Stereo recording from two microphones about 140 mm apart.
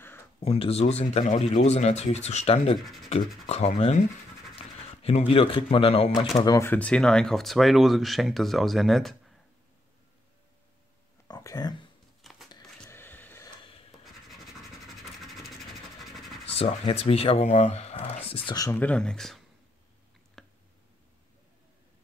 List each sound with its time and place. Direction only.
0.4 s speech: 45° left (ahead or behind)
6.4 s speech: 25° left (ahead or behind)
6.7 s speech: 10° left (ahead or behind)
11.2 s speech: 30° left (ahead or behind)
12.2 s a sound: centre (ahead or behind)
15.0 s vehicle: centre (ahead or behind)
16.4 s speech: 45° left (ahead or behind)
18.5 s speech: 25° left (ahead or behind)
18.8 s speech: 10° left (ahead or behind)
20.4 s a sound: 5° left (ahead or behind)